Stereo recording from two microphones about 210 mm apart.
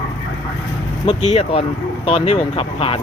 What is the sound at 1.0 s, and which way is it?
Speech, 30° left (ahead or behind).